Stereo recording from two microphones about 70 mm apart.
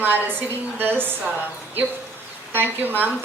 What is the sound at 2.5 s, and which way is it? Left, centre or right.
Speech, right.